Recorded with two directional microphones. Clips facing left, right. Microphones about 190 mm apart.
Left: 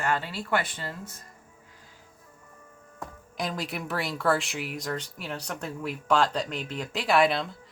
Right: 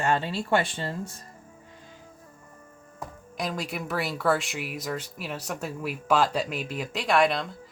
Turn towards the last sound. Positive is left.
turn(degrees=0)  # may be behind; listen again after turning